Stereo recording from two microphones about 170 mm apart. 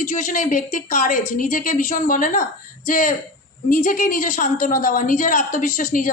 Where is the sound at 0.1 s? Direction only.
50° left (ahead or behind).